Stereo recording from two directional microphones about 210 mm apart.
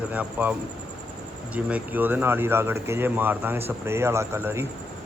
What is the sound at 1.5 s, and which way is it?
Speech, 5° right (ahead or behind).